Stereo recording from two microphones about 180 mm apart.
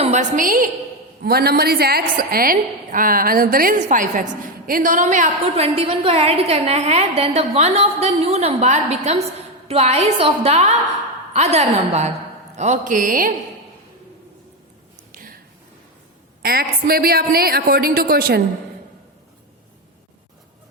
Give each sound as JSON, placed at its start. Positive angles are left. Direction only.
{"t": 0.0, "sound": "a woman's voice", "side_deg": -40}
{"t": 1.2, "sound": "a woman's voice", "side_deg": -60}
{"t": 5.6, "sound": "a woman's voice", "side_deg": -30}
{"t": 15.1, "sound": "a sound", "side_deg": -50}
{"t": 16.4, "sound": "a woman's voice", "side_deg": -60}